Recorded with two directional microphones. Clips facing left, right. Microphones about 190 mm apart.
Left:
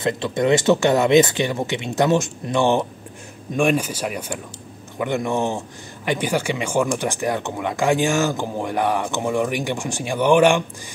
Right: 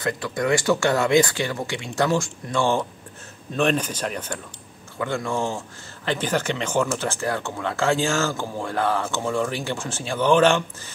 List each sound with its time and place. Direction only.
0.0 s speech: 25° left (ahead or behind)